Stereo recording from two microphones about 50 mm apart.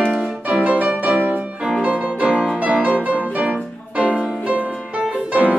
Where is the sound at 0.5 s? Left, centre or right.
Right.